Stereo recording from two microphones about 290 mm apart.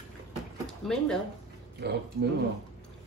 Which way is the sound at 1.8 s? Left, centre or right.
Right.